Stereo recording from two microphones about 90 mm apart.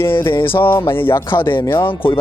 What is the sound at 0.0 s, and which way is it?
Speech, 25° left (ahead or behind).